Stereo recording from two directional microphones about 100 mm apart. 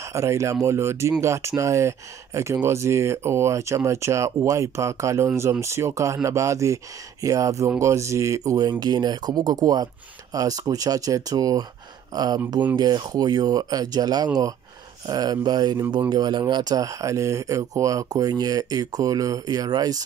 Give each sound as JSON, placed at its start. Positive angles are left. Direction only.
{"t": 0.0, "sound": "speech", "side_deg": -30}